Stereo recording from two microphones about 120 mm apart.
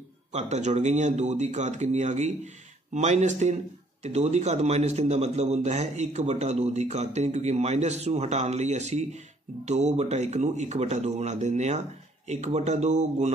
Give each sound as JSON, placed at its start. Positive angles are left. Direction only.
{"t": 0.3, "sound": "a man's voice", "side_deg": -75}